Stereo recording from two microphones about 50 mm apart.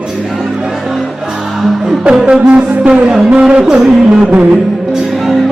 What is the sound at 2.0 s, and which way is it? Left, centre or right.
Music, centre.